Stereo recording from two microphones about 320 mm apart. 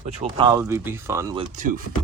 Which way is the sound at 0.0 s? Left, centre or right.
Centre.